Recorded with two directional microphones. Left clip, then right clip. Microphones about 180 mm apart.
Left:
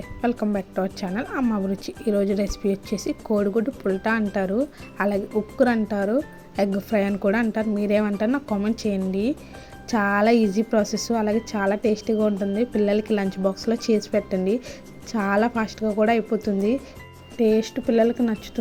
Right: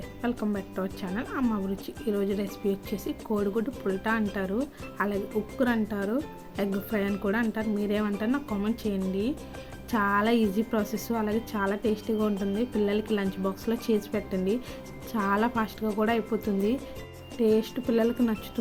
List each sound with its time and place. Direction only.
0.2 s a woman's voice: 30° left (ahead or behind)